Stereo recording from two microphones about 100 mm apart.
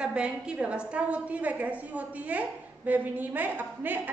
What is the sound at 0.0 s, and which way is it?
A woman's voice, 10° right (ahead or behind).